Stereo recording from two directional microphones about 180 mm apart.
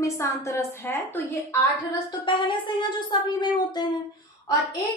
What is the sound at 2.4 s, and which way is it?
Speech, 25° left (ahead or behind).